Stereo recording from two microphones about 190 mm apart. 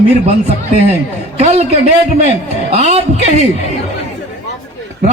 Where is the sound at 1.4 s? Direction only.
35° right (ahead or behind).